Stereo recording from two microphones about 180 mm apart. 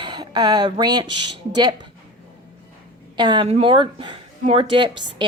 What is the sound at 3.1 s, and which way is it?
Speech, 25° right (ahead or behind).